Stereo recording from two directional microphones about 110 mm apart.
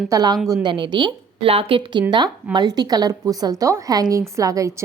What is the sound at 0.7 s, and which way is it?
Speech, 45° right (ahead or behind).